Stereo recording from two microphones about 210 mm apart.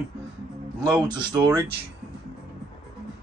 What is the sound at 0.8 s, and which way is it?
Speech, 20° right (ahead or behind).